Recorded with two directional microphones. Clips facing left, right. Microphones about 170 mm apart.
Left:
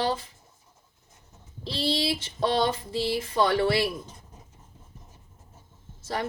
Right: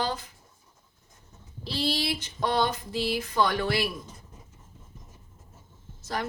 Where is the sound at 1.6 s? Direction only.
25° left (ahead or behind).